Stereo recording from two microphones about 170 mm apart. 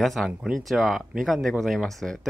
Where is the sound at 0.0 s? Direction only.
Centre (ahead or behind).